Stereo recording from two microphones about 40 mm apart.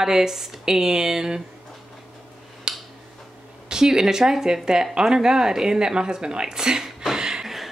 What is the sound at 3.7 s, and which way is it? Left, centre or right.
Speech, centre.